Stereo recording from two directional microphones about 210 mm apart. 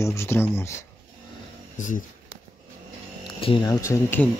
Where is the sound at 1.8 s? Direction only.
40° left (ahead or behind).